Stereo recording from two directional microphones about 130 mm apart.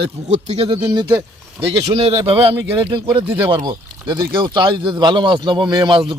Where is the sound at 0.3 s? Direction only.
60° right (ahead or behind).